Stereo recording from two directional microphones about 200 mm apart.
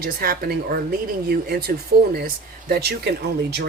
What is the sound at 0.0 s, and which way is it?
Speech, 50° right (ahead or behind).